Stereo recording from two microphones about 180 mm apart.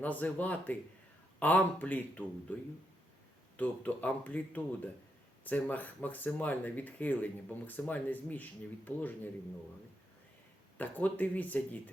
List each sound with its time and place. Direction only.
0.0 s speech: 10° left (ahead or behind)
3.6 s speech: 10° left (ahead or behind)
10.8 s speech: 10° left (ahead or behind)